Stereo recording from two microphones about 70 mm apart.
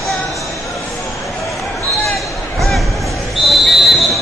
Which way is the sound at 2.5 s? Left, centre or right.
Centre.